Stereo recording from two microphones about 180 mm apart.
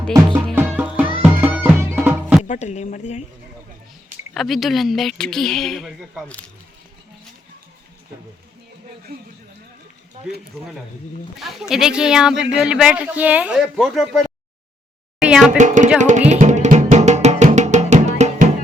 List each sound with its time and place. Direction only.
0.5 s music: 10° right (ahead or behind)
2.4 s speech: 40° left (ahead or behind)
4.4 s a woman's voice: centre (ahead or behind)
11.7 s a woman's voice: 5° right (ahead or behind)
15.2 s a sound: 5° right (ahead or behind)
15.5 s speech: 45° right (ahead or behind)
16.0 s music: 45° right (ahead or behind)